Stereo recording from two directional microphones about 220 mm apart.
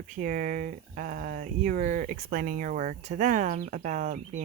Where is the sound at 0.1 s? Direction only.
35° right (ahead or behind).